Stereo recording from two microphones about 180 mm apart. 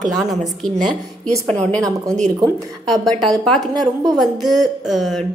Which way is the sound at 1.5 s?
5° left (ahead or behind).